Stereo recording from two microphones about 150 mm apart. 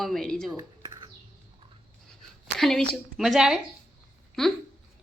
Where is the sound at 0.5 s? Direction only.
25° right (ahead or behind).